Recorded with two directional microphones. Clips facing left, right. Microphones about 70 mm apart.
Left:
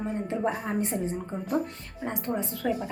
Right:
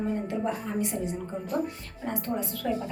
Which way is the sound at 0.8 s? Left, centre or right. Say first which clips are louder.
Left 1 dB; left.